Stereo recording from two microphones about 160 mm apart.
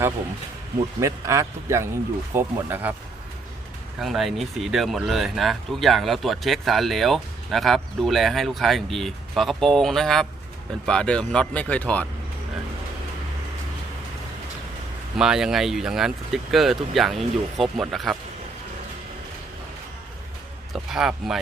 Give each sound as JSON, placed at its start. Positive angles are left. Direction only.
{"t": 0.9, "sound": "a man's voice", "side_deg": -20}
{"t": 4.0, "sound": "speech", "side_deg": 0}
{"t": 15.2, "sound": "speech", "side_deg": -5}
{"t": 20.7, "sound": "speech", "side_deg": -5}